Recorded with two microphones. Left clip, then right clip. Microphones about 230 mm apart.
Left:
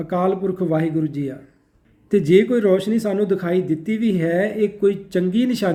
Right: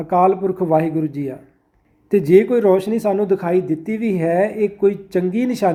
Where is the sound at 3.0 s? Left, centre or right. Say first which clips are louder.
Right 3 dB; right.